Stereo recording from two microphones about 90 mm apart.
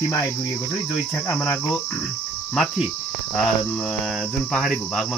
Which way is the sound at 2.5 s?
Centre (ahead or behind).